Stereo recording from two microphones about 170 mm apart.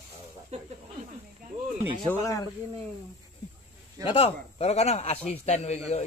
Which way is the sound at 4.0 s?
35° left (ahead or behind).